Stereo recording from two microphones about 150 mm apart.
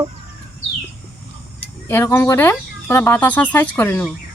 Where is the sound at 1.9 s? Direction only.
15° left (ahead or behind).